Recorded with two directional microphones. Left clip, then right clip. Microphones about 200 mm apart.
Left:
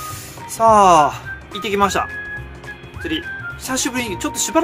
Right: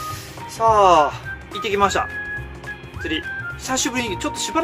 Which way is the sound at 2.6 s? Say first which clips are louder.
Even; 10° left (ahead or behind).